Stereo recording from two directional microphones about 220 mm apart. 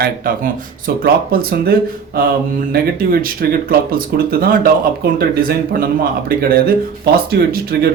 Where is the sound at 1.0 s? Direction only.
45° right (ahead or behind).